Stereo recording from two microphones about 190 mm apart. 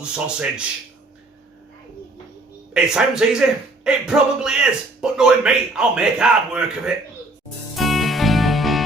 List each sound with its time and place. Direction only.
0.0 s speech: 5° right (ahead or behind)
2.7 s speech: 5° right (ahead or behind)
7.8 s music: centre (ahead or behind)